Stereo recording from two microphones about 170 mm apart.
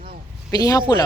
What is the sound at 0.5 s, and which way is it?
Speech, 20° left (ahead or behind).